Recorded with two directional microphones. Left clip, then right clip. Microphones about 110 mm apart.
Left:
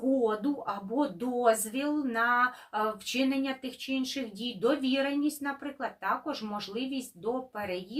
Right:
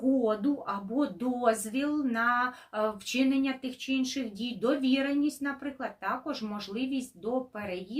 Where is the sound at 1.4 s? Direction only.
25° right (ahead or behind).